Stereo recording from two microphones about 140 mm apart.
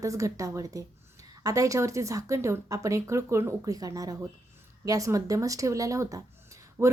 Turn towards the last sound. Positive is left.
turn(degrees=-20)  # may be behind; listen again after turning